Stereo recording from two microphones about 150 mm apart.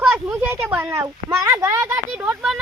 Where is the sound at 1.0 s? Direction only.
25° right (ahead or behind); by 2.5 s 5° right (ahead or behind).